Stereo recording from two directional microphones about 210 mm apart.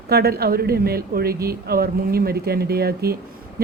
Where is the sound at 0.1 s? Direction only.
50° right (ahead or behind).